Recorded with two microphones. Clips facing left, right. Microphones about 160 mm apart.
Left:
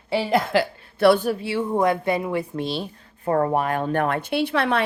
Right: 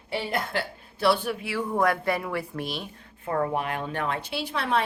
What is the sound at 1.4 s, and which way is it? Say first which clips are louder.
A woman's voice: left 4 dB; 25° left (ahead or behind).